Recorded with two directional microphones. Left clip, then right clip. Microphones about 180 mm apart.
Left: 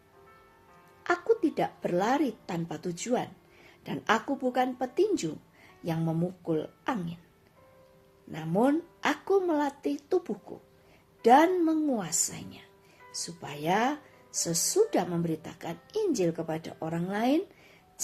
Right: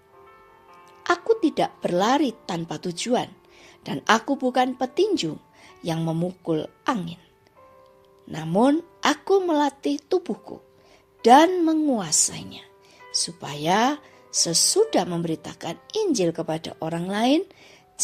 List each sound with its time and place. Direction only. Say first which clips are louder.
1.0 s a woman's voice: right 5 dB; 35° right (ahead or behind)
8.3 s speech: right 6 dB; 40° right (ahead or behind)